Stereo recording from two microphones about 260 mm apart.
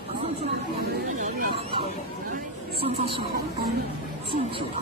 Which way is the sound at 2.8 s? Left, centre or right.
Right.